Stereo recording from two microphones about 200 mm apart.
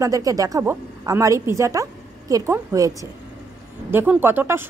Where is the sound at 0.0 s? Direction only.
15° right (ahead or behind).